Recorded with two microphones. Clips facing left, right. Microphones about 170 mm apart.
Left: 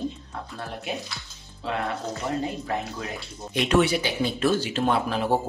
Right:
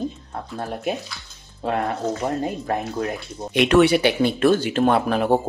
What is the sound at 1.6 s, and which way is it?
Speech, 45° right (ahead or behind).